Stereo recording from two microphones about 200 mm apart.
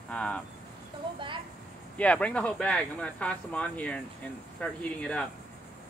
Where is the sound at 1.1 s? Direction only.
25° right (ahead or behind).